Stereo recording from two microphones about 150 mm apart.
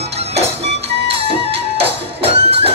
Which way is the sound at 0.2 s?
45° right (ahead or behind).